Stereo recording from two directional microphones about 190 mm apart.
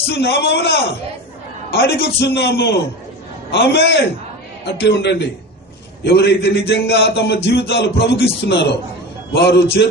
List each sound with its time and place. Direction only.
0.1 s a man's voice: 60° left (ahead or behind)